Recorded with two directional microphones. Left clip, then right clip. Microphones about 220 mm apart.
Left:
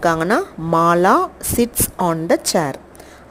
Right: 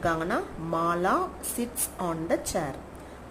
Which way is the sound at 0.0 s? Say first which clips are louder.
Left 11 dB; 45° left (ahead or behind).